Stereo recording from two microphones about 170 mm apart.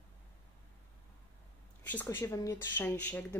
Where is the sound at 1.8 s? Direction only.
10° left (ahead or behind).